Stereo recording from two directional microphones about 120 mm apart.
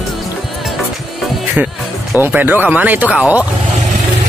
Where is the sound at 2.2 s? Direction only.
15° right (ahead or behind).